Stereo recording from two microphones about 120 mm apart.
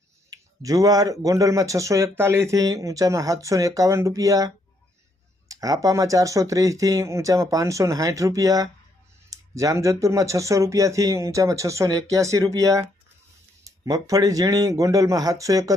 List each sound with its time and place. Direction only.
0.3 s speech: 30° right (ahead or behind)